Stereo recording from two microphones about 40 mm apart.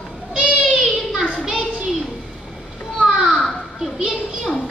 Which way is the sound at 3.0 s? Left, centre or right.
Centre.